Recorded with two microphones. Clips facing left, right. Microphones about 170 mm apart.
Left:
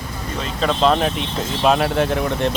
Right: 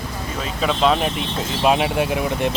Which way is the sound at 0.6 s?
5° right (ahead or behind).